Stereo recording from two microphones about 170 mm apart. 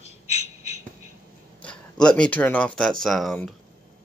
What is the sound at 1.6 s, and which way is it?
Speech, 5° left (ahead or behind).